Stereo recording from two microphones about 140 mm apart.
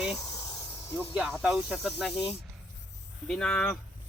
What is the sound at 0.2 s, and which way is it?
Snake, 25° left (ahead or behind).